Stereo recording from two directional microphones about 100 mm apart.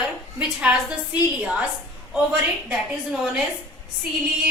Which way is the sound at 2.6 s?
10° right (ahead or behind).